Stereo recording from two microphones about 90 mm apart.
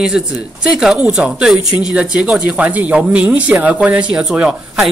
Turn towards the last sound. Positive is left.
turn(degrees=-10)  # may be behind; listen again after turning